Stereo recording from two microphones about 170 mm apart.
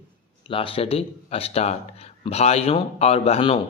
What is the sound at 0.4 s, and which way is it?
A man's voice, 30° left (ahead or behind).